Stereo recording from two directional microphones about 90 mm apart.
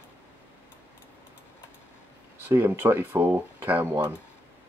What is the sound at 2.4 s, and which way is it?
Speech, 20° right (ahead or behind).